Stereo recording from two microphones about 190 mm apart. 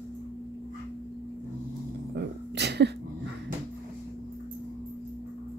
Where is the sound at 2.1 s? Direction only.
60° right (ahead or behind).